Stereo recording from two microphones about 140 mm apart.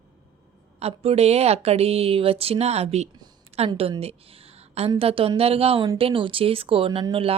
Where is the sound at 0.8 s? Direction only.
45° right (ahead or behind).